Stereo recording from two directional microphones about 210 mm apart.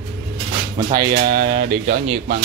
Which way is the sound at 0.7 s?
20° right (ahead or behind).